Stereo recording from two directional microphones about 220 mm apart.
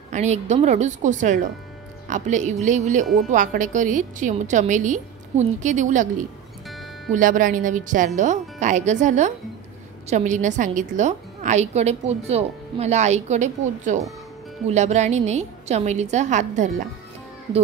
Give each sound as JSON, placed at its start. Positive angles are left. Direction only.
{"t": 0.1, "sound": "a woman's voice", "side_deg": -30}
{"t": 7.1, "sound": "a woman's voice", "side_deg": -35}